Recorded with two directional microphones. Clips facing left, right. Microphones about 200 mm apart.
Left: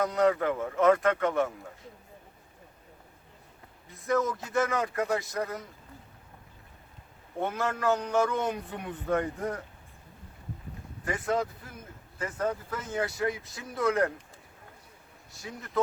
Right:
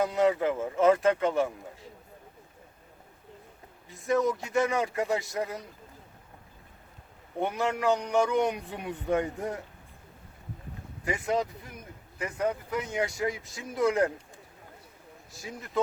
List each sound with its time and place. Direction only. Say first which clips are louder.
0.0 s a man's voice: even; 20° right (ahead or behind)
4.0 s a man's voice: right 2 dB; 20° right (ahead or behind)
7.3 s a man's voice: right 2 dB; 20° right (ahead or behind)
11.0 s a man's voice: right 1 dB; 20° right (ahead or behind)